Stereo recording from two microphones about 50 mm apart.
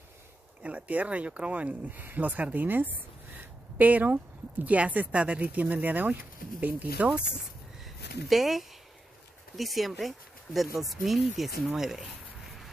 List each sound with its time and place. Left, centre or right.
0.6 s speech: right
7.8 s a sound: centre
9.6 s speech: centre